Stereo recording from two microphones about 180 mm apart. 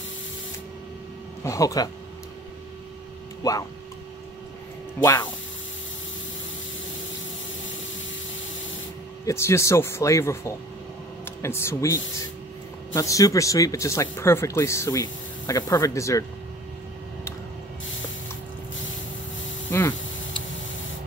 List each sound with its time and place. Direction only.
1.4 s speech: 20° left (ahead or behind)
5.0 s speech: 20° left (ahead or behind)
9.2 s speech: 15° left (ahead or behind)
19.7 s a sound: 15° left (ahead or behind)